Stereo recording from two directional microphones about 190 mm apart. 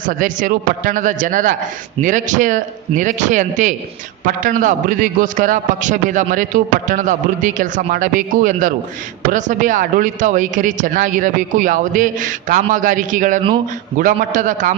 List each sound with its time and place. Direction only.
0.0 s a man's voice: 45° right (ahead or behind)